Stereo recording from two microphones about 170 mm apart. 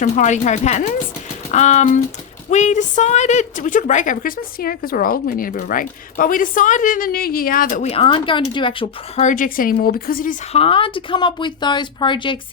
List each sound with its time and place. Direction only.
0.0 s a woman's voice: 45° left (ahead or behind)
7.9 s speech: 35° left (ahead or behind)
9.2 s speech: 50° left (ahead or behind)
10.5 s speech: 35° left (ahead or behind)